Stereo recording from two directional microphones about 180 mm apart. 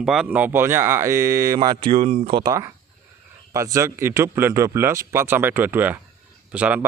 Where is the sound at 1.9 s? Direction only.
35° right (ahead or behind).